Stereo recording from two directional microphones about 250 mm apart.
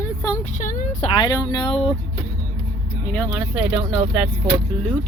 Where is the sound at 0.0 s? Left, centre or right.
Centre.